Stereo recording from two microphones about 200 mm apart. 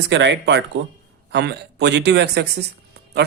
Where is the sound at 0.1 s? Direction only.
60° right (ahead or behind).